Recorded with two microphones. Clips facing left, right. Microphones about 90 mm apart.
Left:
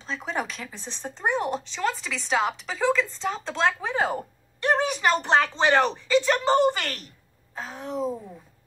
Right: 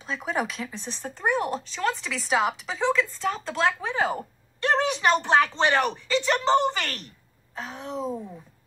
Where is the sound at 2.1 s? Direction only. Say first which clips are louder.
Right 2 dB; 5° right (ahead or behind).